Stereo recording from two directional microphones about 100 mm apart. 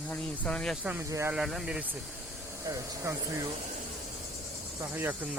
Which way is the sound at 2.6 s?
35° right (ahead or behind).